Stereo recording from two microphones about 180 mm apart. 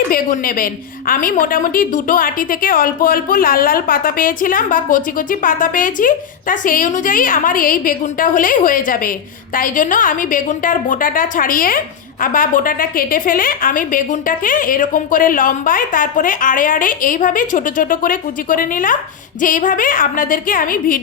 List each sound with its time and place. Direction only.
0.1 s a woman's voice: 55° left (ahead or behind)